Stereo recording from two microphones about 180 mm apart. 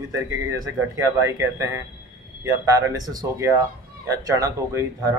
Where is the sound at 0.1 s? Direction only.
20° right (ahead or behind).